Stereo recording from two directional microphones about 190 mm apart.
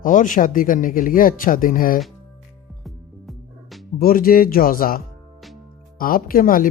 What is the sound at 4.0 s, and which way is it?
Speech, 50° left (ahead or behind).